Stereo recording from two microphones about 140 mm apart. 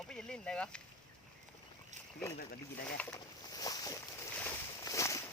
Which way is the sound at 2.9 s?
15° left (ahead or behind).